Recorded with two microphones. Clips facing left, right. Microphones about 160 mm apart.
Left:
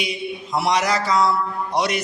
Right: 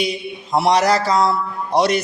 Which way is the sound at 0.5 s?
30° right (ahead or behind).